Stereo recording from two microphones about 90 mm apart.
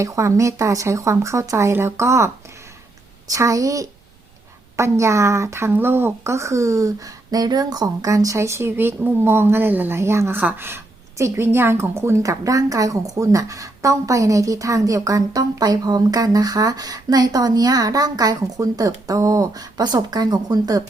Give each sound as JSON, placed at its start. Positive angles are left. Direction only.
{"t": 0.0, "sound": "a woman's voice", "side_deg": -35}
{"t": 3.3, "sound": "a woman's voice", "side_deg": -40}